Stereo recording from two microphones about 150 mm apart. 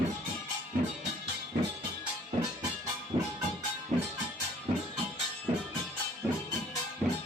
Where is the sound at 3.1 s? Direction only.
35° right (ahead or behind).